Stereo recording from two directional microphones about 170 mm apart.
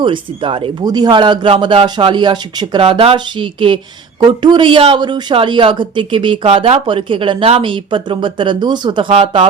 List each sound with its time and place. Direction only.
0.0 s speech: 30° right (ahead or behind)